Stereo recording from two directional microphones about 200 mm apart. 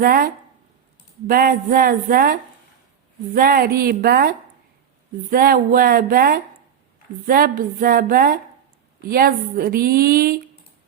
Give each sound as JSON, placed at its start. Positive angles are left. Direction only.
{"t": 0.0, "sound": "a woman's voice", "side_deg": -45}